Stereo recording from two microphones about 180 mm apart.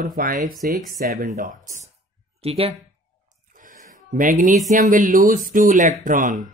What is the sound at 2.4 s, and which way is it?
Speech, 35° right (ahead or behind).